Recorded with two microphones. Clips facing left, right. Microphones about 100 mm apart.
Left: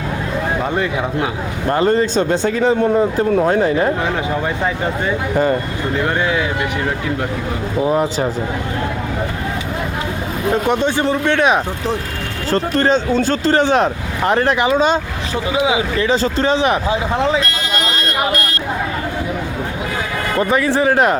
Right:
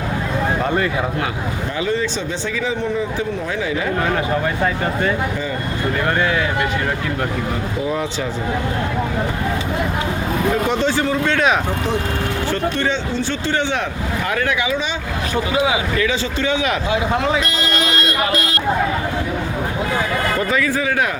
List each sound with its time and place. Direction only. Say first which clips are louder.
1.7 s speech: left 8 dB; 45° left (ahead or behind)
6.1 s speech: left 1 dB; 15° left (ahead or behind)
10.7 s speech: left 2 dB; 15° left (ahead or behind)
12.5 s speech: left 9 dB; 35° left (ahead or behind)
15.5 s speech: left 3 dB; 20° left (ahead or behind)
20.5 s speech: left 4 dB; 30° left (ahead or behind)